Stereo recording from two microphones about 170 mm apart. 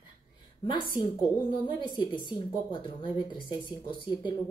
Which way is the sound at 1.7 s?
25° left (ahead or behind).